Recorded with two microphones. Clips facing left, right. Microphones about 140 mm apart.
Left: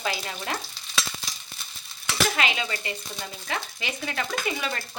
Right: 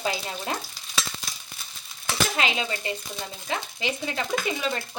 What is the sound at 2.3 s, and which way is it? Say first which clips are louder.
A woman's voice: right 1 dB; 30° right (ahead or behind).